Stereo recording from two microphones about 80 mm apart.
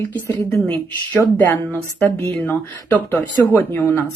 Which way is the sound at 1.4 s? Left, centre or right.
Left.